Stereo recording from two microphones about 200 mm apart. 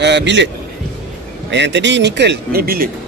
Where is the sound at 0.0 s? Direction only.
60° right (ahead or behind).